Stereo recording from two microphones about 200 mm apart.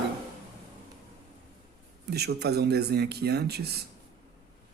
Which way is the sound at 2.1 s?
55° right (ahead or behind).